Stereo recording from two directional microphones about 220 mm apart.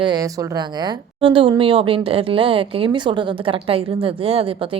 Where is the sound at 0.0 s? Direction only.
15° right (ahead or behind).